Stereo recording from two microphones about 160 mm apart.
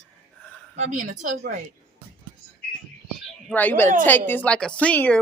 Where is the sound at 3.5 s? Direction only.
10° left (ahead or behind).